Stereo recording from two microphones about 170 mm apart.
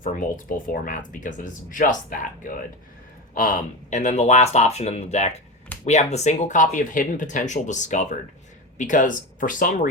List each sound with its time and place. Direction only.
0.0 s speech: 50° left (ahead or behind)